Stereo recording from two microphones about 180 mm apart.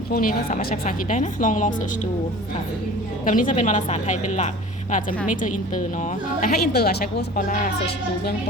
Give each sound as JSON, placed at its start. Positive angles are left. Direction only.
{"t": 0.1, "sound": "speech", "side_deg": 50}
{"t": 3.2, "sound": "speech", "side_deg": 45}